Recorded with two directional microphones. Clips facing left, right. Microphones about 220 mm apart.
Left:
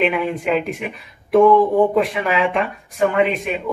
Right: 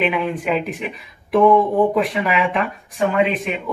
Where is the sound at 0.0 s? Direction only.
Centre (ahead or behind).